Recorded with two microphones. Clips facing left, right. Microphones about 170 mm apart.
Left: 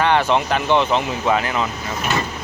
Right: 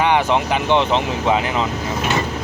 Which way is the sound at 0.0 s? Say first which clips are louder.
Even; 15° right (ahead or behind).